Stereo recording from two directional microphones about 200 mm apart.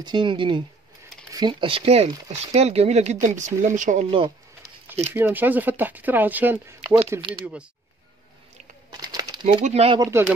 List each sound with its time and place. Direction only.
0.0 s speech: 25° right (ahead or behind)
5.1 s speech: 10° right (ahead or behind)
7.2 s speech: 25° right (ahead or behind)
8.9 s crumpling: 20° right (ahead or behind)
9.9 s speech: 10° right (ahead or behind)